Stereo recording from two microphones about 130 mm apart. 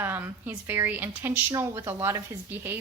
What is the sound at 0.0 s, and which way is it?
A woman's voice, 15° right (ahead or behind).